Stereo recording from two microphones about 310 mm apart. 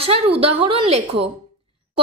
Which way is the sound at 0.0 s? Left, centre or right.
Centre.